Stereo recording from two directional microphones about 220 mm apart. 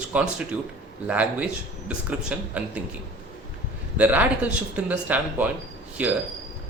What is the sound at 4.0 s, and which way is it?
Speech, 5° right (ahead or behind).